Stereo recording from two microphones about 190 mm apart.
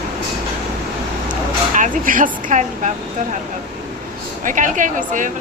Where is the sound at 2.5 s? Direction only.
40° right (ahead or behind).